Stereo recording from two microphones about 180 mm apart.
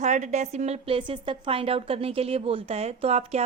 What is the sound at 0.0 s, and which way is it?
A woman's voice, 40° right (ahead or behind).